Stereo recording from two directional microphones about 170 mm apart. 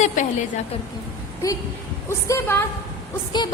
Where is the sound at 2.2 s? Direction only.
15° left (ahead or behind).